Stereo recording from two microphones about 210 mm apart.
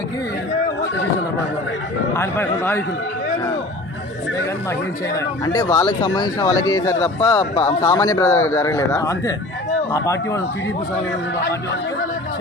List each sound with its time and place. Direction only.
2.1 s speech: 10° left (ahead or behind)
5.5 s speech: 15° left (ahead or behind)